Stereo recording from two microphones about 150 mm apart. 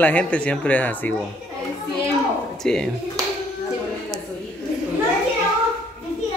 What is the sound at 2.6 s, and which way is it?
Speech, 5° left (ahead or behind).